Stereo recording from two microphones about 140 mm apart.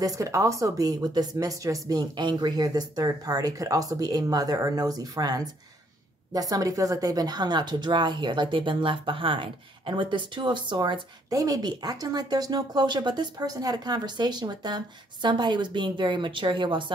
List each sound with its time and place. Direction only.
0.0 s a woman's voice: 25° right (ahead or behind)